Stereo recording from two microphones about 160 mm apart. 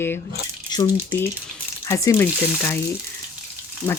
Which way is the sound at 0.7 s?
25° left (ahead or behind).